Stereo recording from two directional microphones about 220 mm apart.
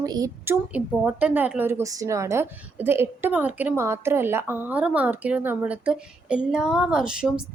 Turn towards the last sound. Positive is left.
turn(degrees=-5)  # may be behind; listen again after turning